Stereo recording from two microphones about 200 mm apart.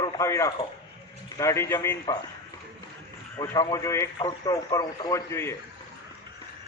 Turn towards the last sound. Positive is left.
turn(degrees=15)  # may be behind; listen again after turning